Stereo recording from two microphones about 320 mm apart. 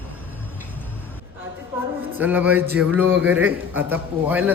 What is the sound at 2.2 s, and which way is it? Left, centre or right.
A man's voice, centre.